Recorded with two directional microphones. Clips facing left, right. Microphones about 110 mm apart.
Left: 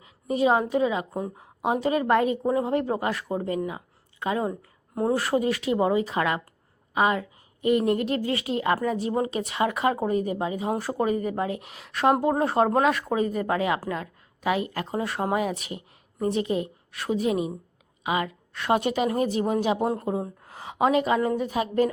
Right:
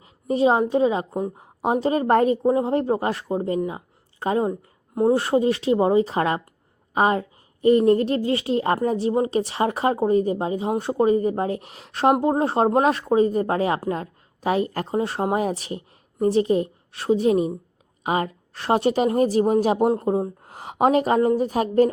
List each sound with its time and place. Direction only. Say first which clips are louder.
0.0 s a sound: right 4 dB; 30° right (ahead or behind)
0.7 s a woman's voice: right 4 dB; 30° right (ahead or behind)
2.4 s a woman's voice: right 4 dB; 30° right (ahead or behind)